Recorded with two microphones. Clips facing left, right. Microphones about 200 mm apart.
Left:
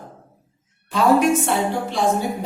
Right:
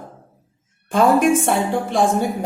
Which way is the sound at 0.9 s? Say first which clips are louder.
Right 2 dB; 50° right (ahead or behind).